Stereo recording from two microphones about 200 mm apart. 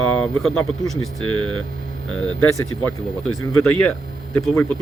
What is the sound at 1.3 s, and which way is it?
Hum, 5° left (ahead or behind).